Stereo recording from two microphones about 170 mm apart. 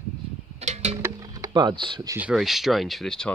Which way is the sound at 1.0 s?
20° right (ahead or behind).